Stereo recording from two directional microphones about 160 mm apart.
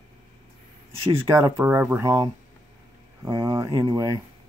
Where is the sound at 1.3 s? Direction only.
15° right (ahead or behind).